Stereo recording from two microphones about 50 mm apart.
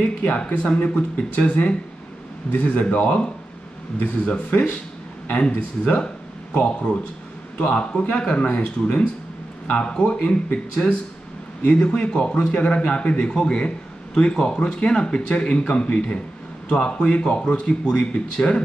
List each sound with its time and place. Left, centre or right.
0.5 s a man's voice: left
4.5 s a man's voice: left
13.2 s a man's voice: centre